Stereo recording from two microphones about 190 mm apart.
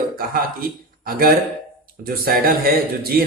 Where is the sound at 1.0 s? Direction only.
50° right (ahead or behind).